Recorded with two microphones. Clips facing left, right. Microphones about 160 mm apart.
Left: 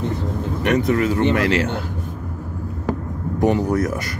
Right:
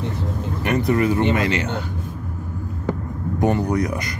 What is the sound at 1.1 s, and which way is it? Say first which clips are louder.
Speech: left 2 dB; 20° right (ahead or behind).